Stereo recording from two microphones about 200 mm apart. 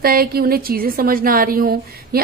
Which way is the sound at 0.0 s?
50° right (ahead or behind).